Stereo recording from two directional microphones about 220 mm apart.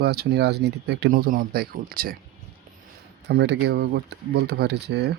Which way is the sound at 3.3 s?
50° right (ahead or behind).